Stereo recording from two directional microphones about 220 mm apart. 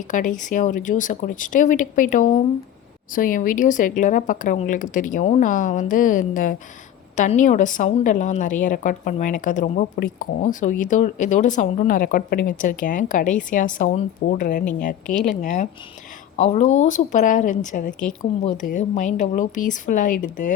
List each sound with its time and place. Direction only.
0.1 s a woman's voice: 35° left (ahead or behind)